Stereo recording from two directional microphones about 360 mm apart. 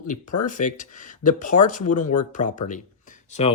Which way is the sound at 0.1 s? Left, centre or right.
Left.